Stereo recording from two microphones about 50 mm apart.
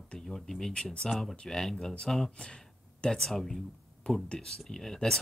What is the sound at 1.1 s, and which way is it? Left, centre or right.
Speech, centre.